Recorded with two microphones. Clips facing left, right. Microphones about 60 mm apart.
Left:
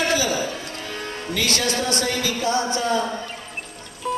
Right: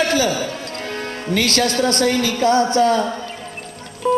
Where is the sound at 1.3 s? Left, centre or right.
Right.